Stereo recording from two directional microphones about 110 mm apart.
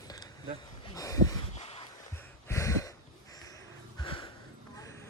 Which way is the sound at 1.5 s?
70° left (ahead or behind).